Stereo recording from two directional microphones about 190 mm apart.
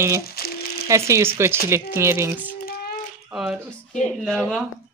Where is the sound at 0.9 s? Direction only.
15° right (ahead or behind).